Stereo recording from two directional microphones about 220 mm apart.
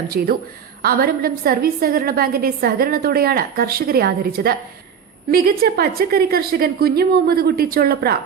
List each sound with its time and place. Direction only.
0.1 s a woman's voice: 40° right (ahead or behind)